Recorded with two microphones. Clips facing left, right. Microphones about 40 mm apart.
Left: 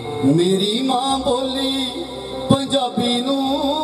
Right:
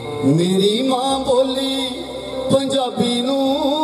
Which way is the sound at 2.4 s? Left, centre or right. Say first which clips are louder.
Right 1 dB; centre.